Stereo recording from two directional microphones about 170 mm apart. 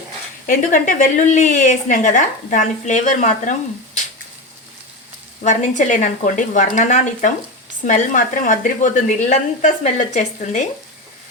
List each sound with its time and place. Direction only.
0.4 s speech: 50° left (ahead or behind)
5.4 s speech: 45° left (ahead or behind)